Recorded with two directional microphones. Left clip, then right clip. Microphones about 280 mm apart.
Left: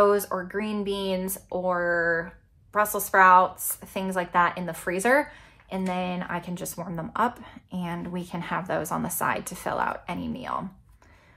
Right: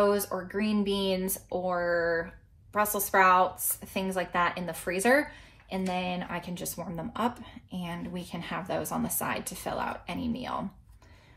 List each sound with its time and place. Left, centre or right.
0.0 s a woman's voice: centre